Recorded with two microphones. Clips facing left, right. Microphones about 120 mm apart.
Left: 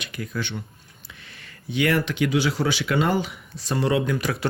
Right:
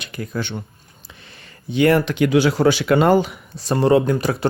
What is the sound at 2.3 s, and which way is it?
Speech, 60° right (ahead or behind).